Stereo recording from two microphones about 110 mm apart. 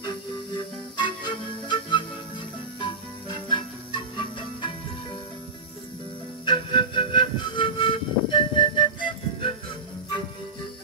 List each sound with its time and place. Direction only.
0.9 s music: 45° left (ahead or behind)
6.4 s music: 50° left (ahead or behind)